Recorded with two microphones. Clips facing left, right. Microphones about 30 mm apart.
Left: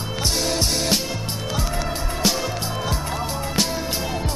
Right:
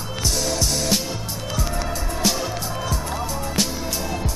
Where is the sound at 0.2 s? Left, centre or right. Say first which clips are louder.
Left 1 dB; left.